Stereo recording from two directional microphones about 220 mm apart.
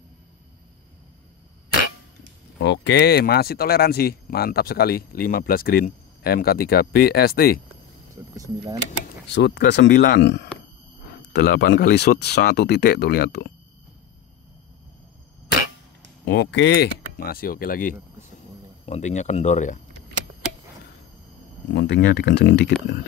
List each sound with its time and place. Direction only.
2.6 s speech: 55° left (ahead or behind)
9.3 s speech: 50° left (ahead or behind)
16.3 s speech: 50° left (ahead or behind); by 19.8 s 35° left (ahead or behind)
21.6 s speech: 55° left (ahead or behind)